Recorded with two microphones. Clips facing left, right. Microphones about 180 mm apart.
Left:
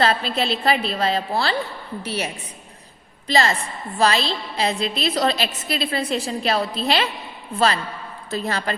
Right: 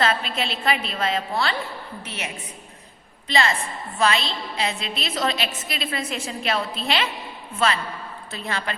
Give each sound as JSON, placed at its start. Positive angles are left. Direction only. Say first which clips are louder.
{"t": 0.0, "sound": "a woman's voice", "louder": "left 3 dB", "side_deg": 35}
{"t": 8.3, "sound": "a woman's voice", "louder": "left 5 dB", "side_deg": 40}